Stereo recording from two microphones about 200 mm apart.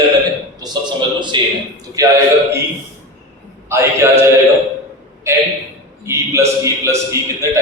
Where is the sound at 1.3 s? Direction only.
25° right (ahead or behind).